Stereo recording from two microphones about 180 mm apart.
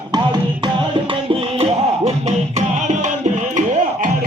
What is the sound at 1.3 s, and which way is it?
Music, 35° right (ahead or behind).